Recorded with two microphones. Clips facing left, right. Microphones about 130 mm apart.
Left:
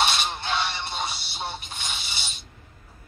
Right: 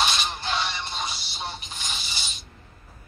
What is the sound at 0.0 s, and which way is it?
Music, 25° left (ahead or behind).